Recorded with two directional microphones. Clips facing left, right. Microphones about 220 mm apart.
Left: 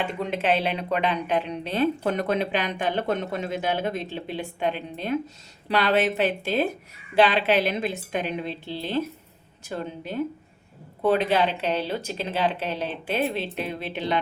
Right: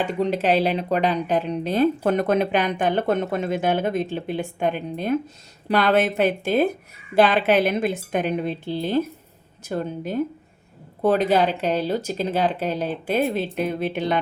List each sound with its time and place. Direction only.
0.0 s speech: 35° right (ahead or behind)